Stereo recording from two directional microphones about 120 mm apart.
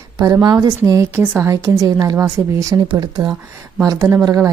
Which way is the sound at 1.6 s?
30° right (ahead or behind).